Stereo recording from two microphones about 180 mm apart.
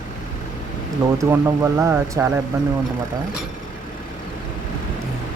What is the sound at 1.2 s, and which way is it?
Speech, 15° right (ahead or behind).